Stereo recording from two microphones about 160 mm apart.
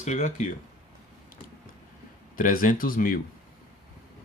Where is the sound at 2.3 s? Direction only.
60° left (ahead or behind).